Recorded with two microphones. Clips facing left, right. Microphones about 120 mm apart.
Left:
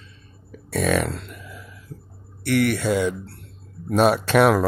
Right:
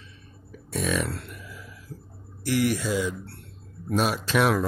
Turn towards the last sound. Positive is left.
turn(degrees=65)  # may be behind; listen again after turning